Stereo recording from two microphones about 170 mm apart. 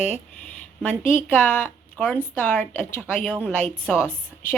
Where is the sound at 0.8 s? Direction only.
5° left (ahead or behind).